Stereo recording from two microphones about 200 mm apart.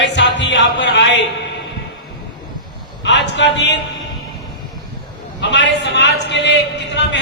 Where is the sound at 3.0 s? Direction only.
60° left (ahead or behind).